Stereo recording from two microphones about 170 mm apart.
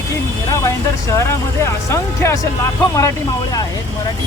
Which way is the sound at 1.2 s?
15° left (ahead or behind).